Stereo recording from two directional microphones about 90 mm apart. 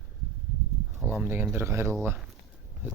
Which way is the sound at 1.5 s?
25° right (ahead or behind).